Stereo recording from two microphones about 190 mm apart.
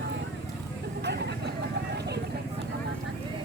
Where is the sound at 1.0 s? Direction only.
60° right (ahead or behind).